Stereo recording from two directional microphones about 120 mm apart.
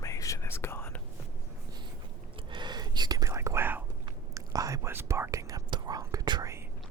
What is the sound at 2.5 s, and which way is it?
Whispering, 40° right (ahead or behind).